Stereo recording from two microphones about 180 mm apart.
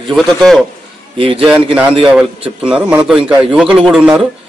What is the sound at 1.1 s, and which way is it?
Speech, 30° right (ahead or behind).